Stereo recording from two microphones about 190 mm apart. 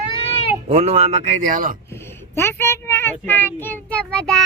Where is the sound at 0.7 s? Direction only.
35° right (ahead or behind).